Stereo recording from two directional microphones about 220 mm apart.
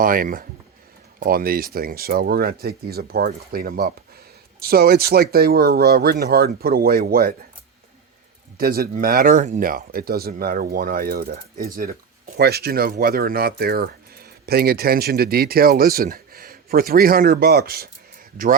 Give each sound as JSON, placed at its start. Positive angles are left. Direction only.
{"t": 0.0, "sound": "speech", "side_deg": -40}
{"t": 8.5, "sound": "speech", "side_deg": -45}